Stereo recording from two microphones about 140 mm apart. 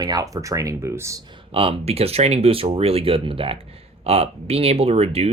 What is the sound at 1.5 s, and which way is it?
Speech, 45° right (ahead or behind).